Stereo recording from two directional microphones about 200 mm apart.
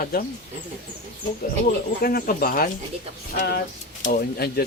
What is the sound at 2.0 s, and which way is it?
Speech, 50° left (ahead or behind).